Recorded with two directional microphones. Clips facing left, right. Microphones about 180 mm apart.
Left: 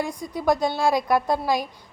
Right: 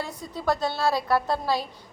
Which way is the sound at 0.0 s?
15° left (ahead or behind).